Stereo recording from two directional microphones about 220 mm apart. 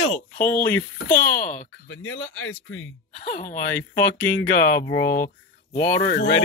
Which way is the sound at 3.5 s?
5° left (ahead or behind).